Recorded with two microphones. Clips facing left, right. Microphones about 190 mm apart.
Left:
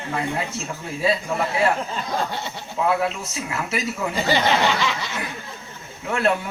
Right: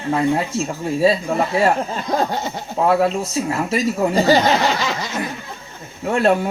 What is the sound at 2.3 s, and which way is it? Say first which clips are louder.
Speech: right 5 dB; 40° right (ahead or behind).